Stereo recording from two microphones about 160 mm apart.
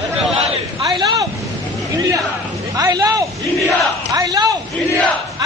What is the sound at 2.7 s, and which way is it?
Speech, 25° right (ahead or behind).